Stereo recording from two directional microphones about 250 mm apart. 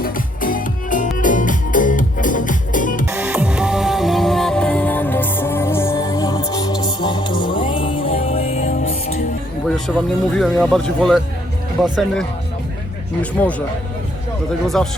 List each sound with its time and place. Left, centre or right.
0.0 s music: left
3.1 s music: centre; by 9.1 s left
9.6 s music: centre
10.3 s speech: centre
14.8 s speech: centre